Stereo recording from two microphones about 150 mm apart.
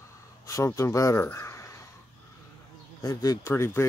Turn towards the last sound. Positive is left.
turn(degrees=15)  # may be behind; listen again after turning